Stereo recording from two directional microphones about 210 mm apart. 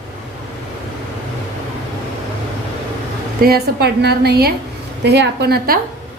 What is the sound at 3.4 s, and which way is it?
A woman's voice, 45° right (ahead or behind).